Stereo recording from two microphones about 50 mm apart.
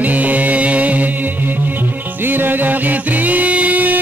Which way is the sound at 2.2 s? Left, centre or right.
Right.